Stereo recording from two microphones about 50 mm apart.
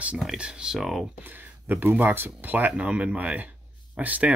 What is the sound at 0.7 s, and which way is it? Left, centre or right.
Speech, centre.